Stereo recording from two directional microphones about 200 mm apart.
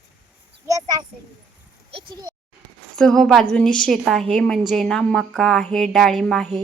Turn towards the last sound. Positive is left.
turn(degrees=0)  # may be behind; listen again after turning